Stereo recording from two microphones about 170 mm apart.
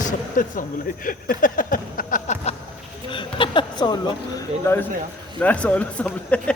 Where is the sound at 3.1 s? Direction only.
30° left (ahead or behind).